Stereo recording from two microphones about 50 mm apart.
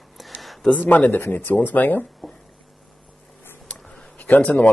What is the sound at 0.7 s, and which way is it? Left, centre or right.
Speech, left.